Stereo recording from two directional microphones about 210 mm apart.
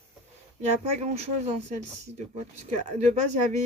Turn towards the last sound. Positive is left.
turn(degrees=-30)  # may be behind; listen again after turning